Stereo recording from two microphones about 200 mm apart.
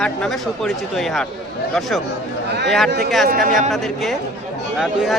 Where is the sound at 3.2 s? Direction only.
45° right (ahead or behind).